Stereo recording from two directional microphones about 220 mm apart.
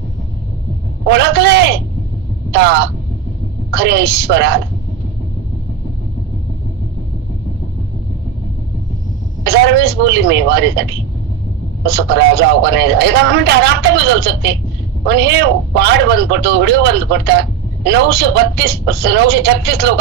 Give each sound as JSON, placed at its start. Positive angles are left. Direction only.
{"t": 1.0, "sound": "speech", "side_deg": -50}
{"t": 9.4, "sound": "speech", "side_deg": -50}